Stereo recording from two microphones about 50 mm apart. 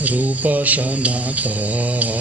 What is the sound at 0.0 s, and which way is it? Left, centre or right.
Mantra, right.